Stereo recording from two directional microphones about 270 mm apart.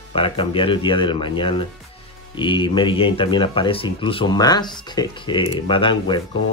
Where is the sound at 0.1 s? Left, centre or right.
Centre.